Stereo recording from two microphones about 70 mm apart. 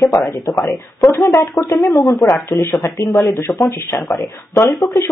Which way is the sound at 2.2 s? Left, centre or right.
Left.